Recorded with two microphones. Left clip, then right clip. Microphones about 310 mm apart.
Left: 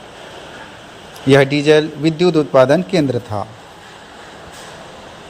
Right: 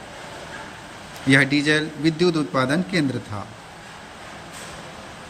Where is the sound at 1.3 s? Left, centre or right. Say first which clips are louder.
Left 7 dB; centre.